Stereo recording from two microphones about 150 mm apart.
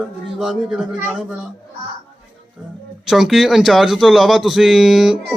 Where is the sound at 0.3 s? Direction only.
5° right (ahead or behind).